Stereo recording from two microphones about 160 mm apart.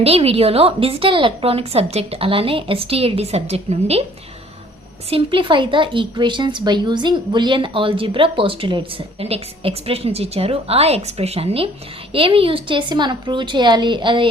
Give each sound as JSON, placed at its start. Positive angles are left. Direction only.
{"t": 0.0, "sound": "speech", "side_deg": -40}
{"t": 5.0, "sound": "speech", "side_deg": -35}